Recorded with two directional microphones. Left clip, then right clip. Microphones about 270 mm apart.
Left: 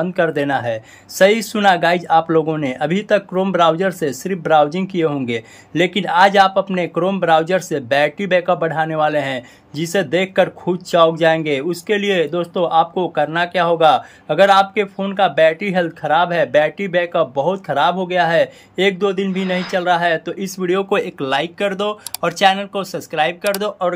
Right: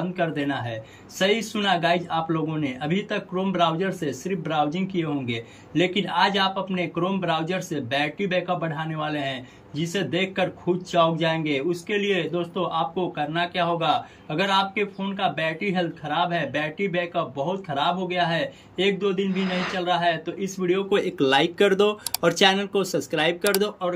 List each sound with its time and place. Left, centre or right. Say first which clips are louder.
0.1 s speech: left 8 dB; centre